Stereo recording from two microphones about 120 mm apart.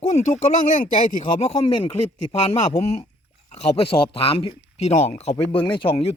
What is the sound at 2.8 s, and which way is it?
Speech, 60° left (ahead or behind).